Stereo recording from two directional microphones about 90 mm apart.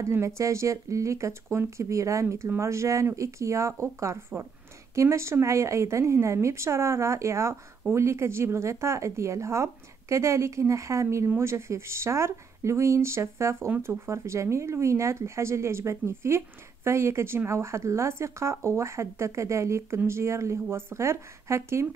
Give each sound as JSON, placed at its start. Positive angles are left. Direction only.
{"t": 0.0, "sound": "speech", "side_deg": -30}